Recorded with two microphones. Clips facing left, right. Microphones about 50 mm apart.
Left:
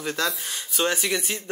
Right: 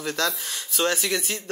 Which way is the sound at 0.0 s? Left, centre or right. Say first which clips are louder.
Even; centre.